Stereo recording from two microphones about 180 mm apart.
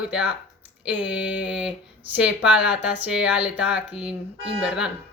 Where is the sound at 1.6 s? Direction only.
10° right (ahead or behind).